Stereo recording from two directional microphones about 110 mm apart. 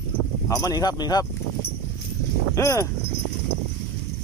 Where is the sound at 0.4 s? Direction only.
30° left (ahead or behind).